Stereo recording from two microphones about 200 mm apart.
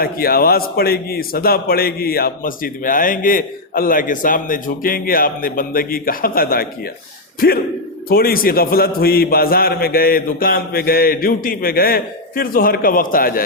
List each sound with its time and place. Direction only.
0.0 s a man's voice: 45° left (ahead or behind)